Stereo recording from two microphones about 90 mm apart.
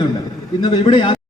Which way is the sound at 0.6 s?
70° left (ahead or behind).